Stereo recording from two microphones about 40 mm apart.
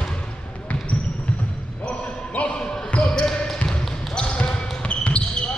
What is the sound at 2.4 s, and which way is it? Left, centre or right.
Basketball bounce, left.